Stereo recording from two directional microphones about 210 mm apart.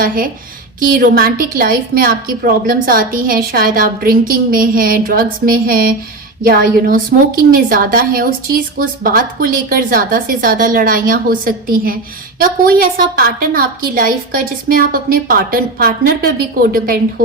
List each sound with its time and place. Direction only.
0.8 s a woman's voice: 45° right (ahead or behind)